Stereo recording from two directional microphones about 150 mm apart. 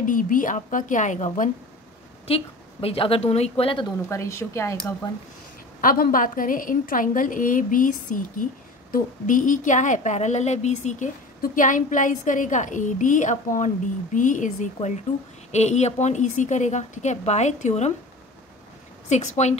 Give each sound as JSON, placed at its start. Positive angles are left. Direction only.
{"t": 0.0, "sound": "a woman's voice", "side_deg": 65}
{"t": 2.2, "sound": "a woman's voice", "side_deg": 40}
{"t": 4.1, "sound": "speech", "side_deg": 20}
{"t": 5.8, "sound": "a woman's voice", "side_deg": 70}
{"t": 11.4, "sound": "a woman's voice", "side_deg": 60}
{"t": 19.0, "sound": "a woman's voice", "side_deg": 50}